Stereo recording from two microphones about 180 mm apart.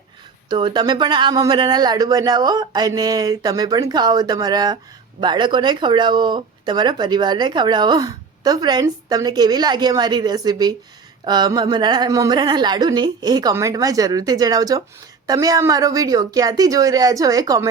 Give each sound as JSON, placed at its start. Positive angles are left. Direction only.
{"t": 0.5, "sound": "speech", "side_deg": -25}